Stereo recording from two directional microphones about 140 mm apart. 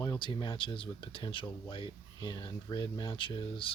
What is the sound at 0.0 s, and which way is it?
Speech, 30° left (ahead or behind).